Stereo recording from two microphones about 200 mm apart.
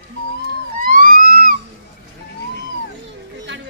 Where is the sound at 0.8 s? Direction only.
45° right (ahead or behind).